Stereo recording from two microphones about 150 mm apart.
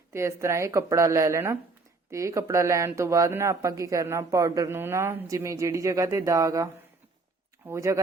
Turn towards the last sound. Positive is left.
turn(degrees=-20)  # may be behind; listen again after turning